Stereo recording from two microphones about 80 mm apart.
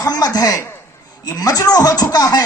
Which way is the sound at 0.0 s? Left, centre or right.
Left.